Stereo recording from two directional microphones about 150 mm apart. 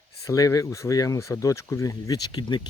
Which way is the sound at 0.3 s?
20° left (ahead or behind).